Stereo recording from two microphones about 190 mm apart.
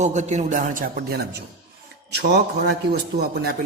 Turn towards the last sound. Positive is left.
turn(degrees=-55)  # may be behind; listen again after turning